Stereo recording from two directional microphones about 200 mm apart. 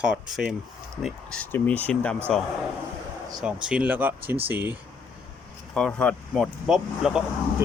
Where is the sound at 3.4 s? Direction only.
5° right (ahead or behind).